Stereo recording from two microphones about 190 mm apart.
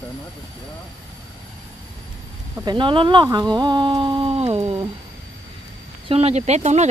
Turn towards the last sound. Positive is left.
turn(degrees=-35)  # may be behind; listen again after turning